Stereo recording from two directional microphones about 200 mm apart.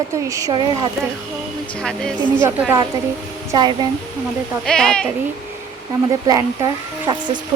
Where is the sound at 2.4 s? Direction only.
10° right (ahead or behind).